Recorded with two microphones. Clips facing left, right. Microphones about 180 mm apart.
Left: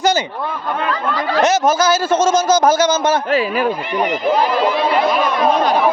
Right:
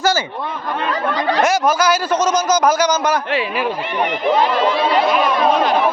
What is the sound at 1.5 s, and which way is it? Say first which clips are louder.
A man's voice: left 3 dB; 25° left (ahead or behind).